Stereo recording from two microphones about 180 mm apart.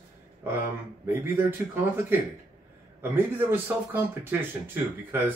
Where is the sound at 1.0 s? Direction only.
10° right (ahead or behind).